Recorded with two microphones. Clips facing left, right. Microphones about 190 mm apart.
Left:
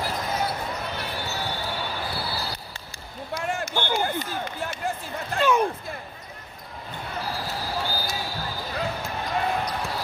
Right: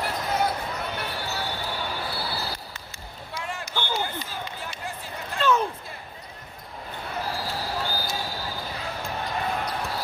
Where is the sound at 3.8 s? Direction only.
15° left (ahead or behind).